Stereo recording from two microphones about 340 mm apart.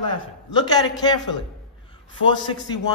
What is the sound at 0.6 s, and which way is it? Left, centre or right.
Speech, centre.